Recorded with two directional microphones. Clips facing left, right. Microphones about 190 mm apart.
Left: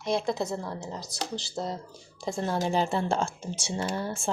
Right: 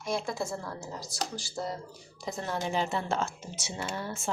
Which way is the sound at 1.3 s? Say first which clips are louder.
Left 5 dB; 20° left (ahead or behind).